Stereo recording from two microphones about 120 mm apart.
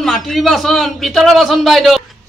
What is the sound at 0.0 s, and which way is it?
A child's voice, centre (ahead or behind).